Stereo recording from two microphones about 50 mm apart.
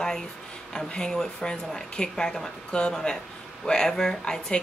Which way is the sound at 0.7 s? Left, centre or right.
Centre.